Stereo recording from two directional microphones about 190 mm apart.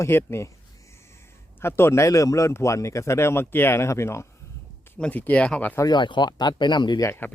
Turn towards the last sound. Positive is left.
turn(degrees=15)  # may be behind; listen again after turning